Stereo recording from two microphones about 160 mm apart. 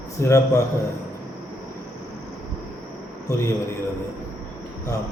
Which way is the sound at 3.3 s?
20° left (ahead or behind).